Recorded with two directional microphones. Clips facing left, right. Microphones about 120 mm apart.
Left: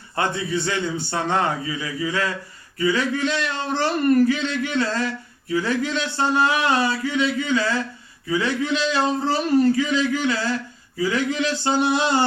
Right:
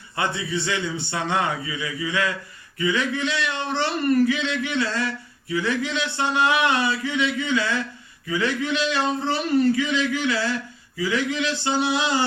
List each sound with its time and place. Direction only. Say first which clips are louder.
0.2 s speech: left 2 dB; 45° left (ahead or behind)